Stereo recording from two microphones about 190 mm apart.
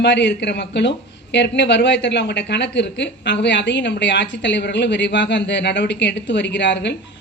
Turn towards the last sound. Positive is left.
turn(degrees=65)  # may be behind; listen again after turning